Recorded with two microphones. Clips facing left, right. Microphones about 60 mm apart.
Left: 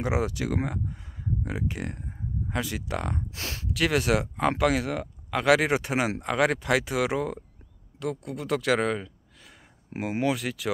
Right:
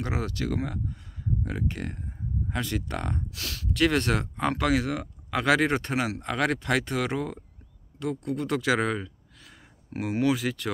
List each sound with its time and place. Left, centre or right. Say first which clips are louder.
0.0 s speech: left 3 dB; centre
3.3 s speech: left 2 dB; left
3.7 s speech: even; centre
9.9 s speech: even; left
10.2 s speech: right 2 dB; centre